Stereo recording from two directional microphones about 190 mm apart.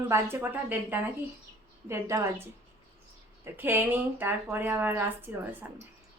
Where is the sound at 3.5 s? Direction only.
10° right (ahead or behind).